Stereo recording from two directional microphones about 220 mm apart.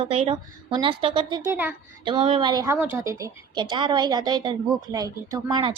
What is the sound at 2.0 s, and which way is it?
Speech, 25° right (ahead or behind).